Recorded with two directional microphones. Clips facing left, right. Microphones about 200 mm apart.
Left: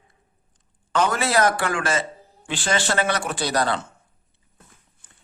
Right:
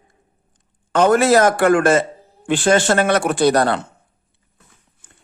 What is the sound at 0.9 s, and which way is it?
A man's voice, 50° right (ahead or behind).